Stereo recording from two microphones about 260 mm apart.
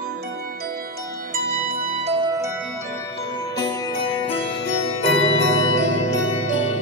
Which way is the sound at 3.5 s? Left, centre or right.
Centre.